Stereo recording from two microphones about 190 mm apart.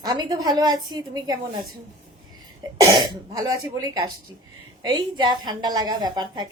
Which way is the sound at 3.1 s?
20° right (ahead or behind).